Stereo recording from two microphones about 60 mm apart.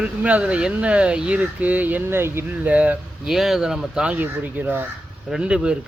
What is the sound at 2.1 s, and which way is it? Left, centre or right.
Speech, right.